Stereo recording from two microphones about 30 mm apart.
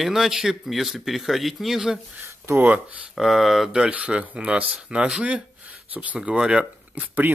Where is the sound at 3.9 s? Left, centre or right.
Right.